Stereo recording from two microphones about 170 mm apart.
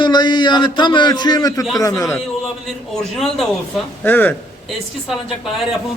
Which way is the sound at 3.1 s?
Centre (ahead or behind).